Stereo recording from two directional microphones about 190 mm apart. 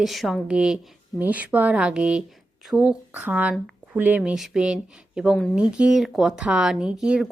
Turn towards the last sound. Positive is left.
turn(degrees=-5)  # may be behind; listen again after turning